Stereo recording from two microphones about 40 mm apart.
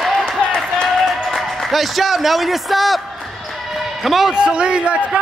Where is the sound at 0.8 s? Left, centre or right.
Centre.